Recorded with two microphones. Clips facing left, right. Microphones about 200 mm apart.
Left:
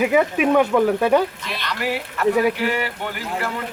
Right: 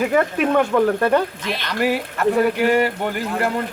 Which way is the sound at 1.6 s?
45° right (ahead or behind).